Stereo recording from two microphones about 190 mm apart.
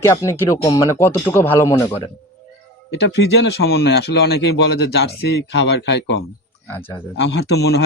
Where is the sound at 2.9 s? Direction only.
60° left (ahead or behind).